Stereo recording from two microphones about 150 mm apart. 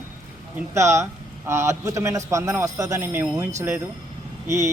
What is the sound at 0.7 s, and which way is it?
Speech, 20° right (ahead or behind).